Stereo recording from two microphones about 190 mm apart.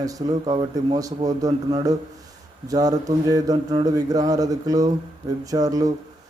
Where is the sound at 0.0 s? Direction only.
20° right (ahead or behind).